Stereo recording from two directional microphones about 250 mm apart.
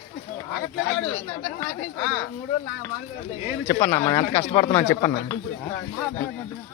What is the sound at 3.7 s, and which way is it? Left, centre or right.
Speech, centre.